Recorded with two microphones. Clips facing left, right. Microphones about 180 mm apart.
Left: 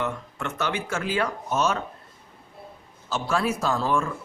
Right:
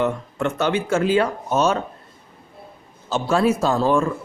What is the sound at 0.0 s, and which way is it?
Speech, 25° right (ahead or behind).